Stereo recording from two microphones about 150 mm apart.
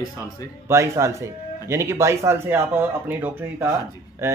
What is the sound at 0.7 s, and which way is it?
Speech, 20° right (ahead or behind).